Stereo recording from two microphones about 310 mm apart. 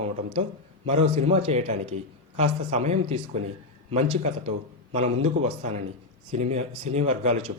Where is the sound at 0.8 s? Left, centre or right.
Right.